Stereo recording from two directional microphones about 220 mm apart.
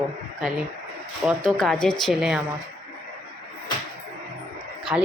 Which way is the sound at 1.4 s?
5° left (ahead or behind).